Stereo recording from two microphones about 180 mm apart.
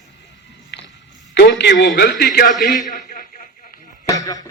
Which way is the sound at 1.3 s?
75° left (ahead or behind).